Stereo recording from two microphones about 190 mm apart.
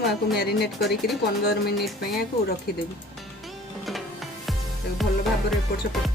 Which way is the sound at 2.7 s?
55° left (ahead or behind).